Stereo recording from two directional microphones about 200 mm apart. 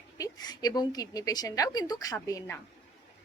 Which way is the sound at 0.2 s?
20° left (ahead or behind).